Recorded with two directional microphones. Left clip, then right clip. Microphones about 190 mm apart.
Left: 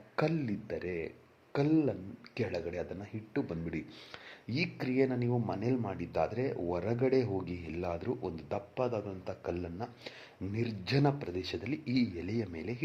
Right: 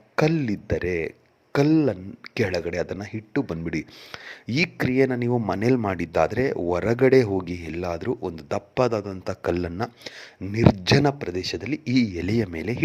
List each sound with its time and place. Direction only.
0.2 s a man's voice: 40° right (ahead or behind)
10.0 s speech: 30° right (ahead or behind)